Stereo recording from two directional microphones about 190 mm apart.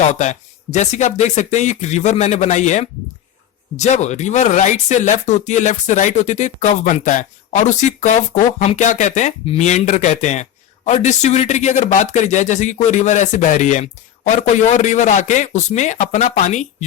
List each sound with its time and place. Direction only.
0.0 s speech: 40° left (ahead or behind)